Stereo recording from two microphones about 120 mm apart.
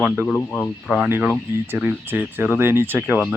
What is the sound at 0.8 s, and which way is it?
Speech, 5° right (ahead or behind).